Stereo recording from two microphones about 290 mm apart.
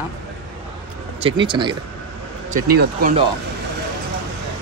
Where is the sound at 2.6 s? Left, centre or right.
Right.